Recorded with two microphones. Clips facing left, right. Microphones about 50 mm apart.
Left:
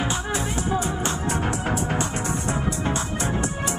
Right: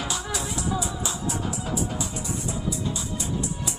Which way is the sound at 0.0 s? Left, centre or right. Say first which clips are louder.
Left 4 dB; left.